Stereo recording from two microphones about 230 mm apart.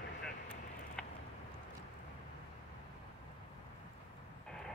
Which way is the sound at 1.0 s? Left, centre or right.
Centre.